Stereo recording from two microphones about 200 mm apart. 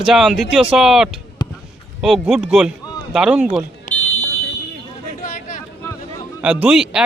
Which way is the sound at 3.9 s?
40° left (ahead or behind).